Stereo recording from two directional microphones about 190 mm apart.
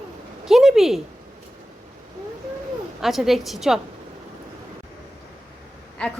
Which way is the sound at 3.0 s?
Centre (ahead or behind).